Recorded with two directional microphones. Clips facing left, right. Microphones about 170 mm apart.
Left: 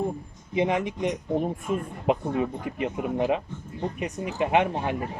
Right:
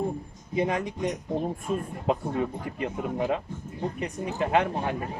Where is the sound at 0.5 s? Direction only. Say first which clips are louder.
Left 2 dB; 20° left (ahead or behind).